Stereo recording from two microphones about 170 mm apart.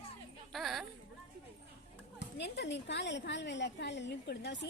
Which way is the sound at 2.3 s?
85° left.